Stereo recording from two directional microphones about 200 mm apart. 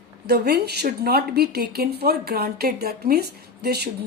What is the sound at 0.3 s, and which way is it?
Speech, 55° right (ahead or behind).